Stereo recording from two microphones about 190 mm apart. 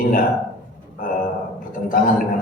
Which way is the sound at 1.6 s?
45° left (ahead or behind).